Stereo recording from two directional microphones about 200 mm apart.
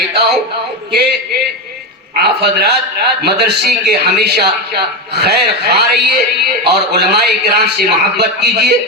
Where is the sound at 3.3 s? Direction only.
55° right (ahead or behind).